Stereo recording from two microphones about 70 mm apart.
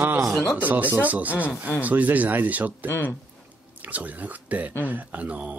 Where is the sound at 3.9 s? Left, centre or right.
Right.